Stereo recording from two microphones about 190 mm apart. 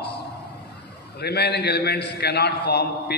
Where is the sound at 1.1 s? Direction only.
60° left (ahead or behind).